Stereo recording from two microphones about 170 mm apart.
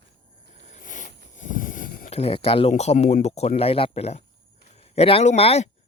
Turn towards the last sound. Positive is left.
turn(degrees=35)  # may be behind; listen again after turning